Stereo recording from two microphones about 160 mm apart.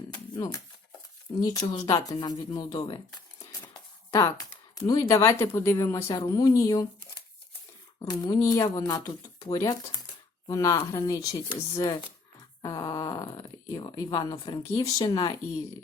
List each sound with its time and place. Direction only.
0.1 s a sound: 25° left (ahead or behind)
1.4 s speech: 25° left (ahead or behind)
7.9 s speech: 25° left (ahead or behind)